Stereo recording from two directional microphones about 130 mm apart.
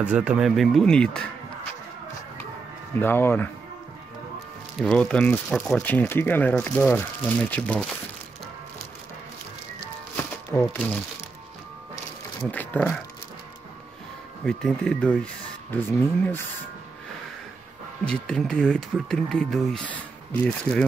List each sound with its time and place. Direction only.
0.0 s speech: 10° right (ahead or behind); by 1.2 s 5° left (ahead or behind)
2.9 s speech: 15° left (ahead or behind)
4.7 s speech: 5° left (ahead or behind)
10.1 s crumpling: 15° left (ahead or behind)
12.4 s speech: 10° left (ahead or behind)
14.4 s speech: 5° left (ahead or behind)
18.0 s speech: 5° left (ahead or behind)